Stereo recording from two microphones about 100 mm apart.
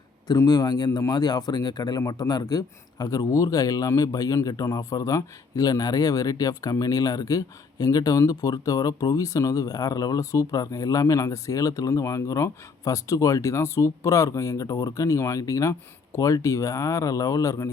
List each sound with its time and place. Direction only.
0.3 s speech: 40° left (ahead or behind)